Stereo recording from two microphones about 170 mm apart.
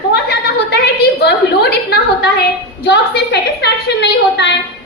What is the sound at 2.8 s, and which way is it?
A woman's voice, 80° left.